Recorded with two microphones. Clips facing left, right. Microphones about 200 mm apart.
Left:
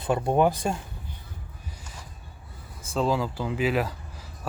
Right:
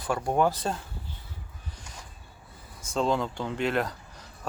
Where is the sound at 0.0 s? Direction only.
25° left (ahead or behind).